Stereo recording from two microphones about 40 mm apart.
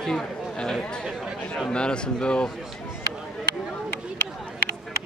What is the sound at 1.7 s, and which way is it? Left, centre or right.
Speech, left.